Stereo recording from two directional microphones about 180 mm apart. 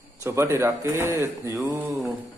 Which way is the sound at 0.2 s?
15° right (ahead or behind).